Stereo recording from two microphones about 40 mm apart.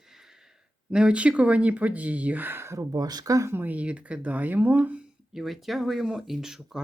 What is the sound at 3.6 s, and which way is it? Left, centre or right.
Speech, right.